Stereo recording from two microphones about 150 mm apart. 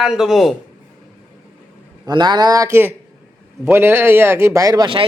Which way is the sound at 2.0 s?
30° right (ahead or behind).